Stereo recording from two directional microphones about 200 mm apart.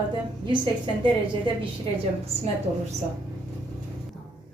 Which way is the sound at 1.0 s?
25° right (ahead or behind).